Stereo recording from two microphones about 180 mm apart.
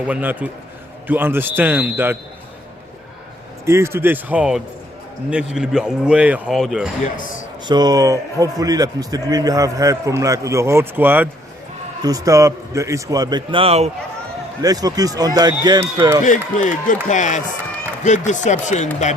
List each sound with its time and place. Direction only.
0.1 s a man's voice: 10° right (ahead or behind)
3.7 s a man's voice: 15° right (ahead or behind)
7.0 s speech: 45° left (ahead or behind)
7.7 s a man's voice: 20° right (ahead or behind)
14.6 s a man's voice: 20° right (ahead or behind)
16.2 s speech: 45° left (ahead or behind)